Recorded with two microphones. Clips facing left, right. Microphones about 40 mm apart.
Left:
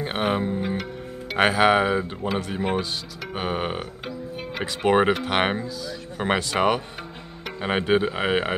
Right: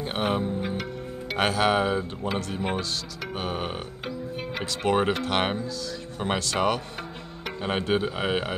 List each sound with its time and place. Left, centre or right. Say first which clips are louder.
0.0 s music: left 2 dB; centre
0.6 s music: left 3 dB; centre
1.4 s speech: left 5 dB; centre
4.0 s music: even; centre
4.8 s speech: left 4 dB; centre